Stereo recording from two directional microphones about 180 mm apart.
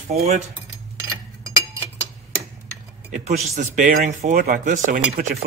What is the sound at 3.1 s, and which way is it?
Speech, 40° right (ahead or behind).